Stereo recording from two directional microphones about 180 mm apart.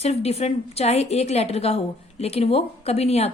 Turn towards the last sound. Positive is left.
turn(degrees=35)  # may be behind; listen again after turning